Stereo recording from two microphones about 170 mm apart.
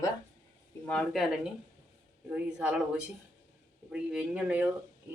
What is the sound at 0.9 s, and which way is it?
Speech, 5° left (ahead or behind).